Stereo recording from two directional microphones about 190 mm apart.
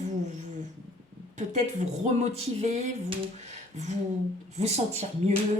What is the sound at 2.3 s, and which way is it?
Speech, 35° right (ahead or behind).